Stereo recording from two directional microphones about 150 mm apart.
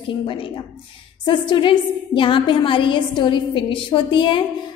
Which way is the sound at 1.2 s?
35° left (ahead or behind).